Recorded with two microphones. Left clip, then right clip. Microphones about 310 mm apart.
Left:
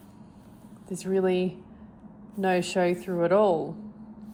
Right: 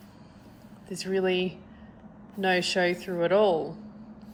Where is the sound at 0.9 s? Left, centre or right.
Left.